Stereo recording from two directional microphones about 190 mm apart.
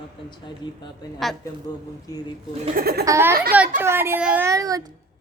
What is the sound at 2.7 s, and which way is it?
Speech, 55° right (ahead or behind).